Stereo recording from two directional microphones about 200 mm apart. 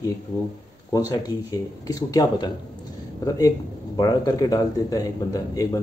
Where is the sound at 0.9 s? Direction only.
20° left (ahead or behind).